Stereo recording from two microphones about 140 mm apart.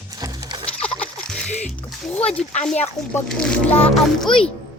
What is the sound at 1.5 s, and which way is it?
Music, 55° left (ahead or behind).